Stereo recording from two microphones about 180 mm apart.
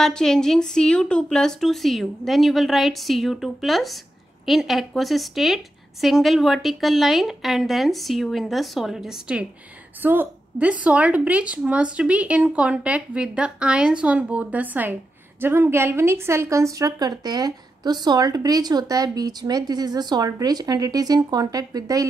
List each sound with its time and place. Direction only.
0.0 s a woman's voice: 5° left (ahead or behind); by 22.0 s 20° right (ahead or behind)